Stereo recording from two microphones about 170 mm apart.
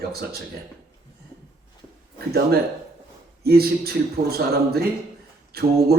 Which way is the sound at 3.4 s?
65° right (ahead or behind).